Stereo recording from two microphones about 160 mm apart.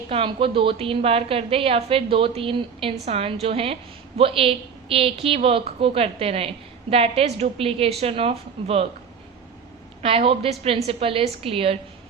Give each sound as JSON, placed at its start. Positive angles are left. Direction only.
{"t": 0.1, "sound": "a woman's voice", "side_deg": -35}
{"t": 10.0, "sound": "a woman's voice", "side_deg": -35}